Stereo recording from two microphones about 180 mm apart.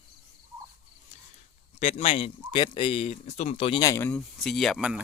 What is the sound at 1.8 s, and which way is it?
Speech, 35° left (ahead or behind).